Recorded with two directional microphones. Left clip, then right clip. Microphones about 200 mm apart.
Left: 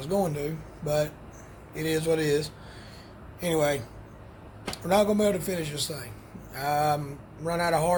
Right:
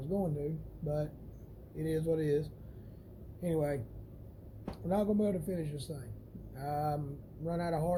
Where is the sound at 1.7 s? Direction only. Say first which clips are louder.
Left 8 dB; 15° left (ahead or behind).